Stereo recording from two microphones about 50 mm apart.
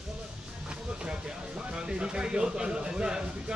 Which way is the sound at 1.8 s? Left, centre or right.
Centre.